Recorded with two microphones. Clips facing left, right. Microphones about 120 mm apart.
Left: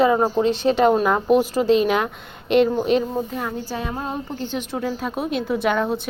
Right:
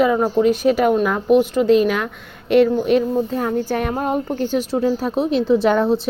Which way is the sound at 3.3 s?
40° right (ahead or behind).